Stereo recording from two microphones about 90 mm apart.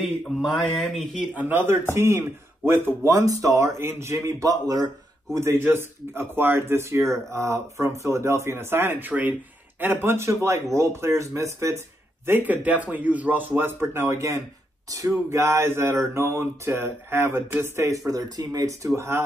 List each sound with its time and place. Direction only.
0.4 s speech: centre (ahead or behind)
1.3 s speech: 20° right (ahead or behind); by 5.4 s 45° right (ahead or behind)
5.4 s speech: 25° right (ahead or behind)
12.3 s speech: 20° right (ahead or behind)